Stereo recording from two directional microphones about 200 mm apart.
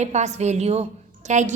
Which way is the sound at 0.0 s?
35° right (ahead or behind).